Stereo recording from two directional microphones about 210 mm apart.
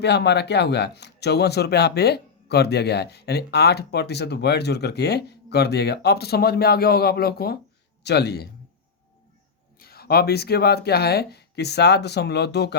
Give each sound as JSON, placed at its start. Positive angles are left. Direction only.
{"t": 0.0, "sound": "speech", "side_deg": 55}
{"t": 9.7, "sound": "speech", "side_deg": 45}